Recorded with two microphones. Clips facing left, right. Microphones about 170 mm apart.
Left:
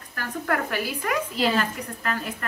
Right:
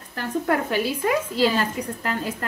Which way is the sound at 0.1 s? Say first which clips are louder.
Right 4 dB; 25° right (ahead or behind).